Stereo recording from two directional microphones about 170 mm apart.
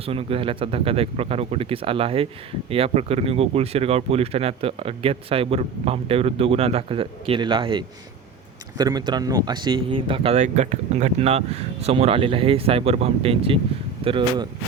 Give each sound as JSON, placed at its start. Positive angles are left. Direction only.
{"t": 0.0, "sound": "speech", "side_deg": -35}